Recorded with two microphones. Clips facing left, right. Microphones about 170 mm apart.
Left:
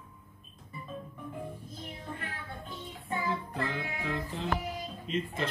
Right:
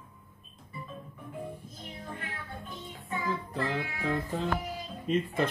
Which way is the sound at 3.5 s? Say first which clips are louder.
Right 2 dB; 35° right (ahead or behind).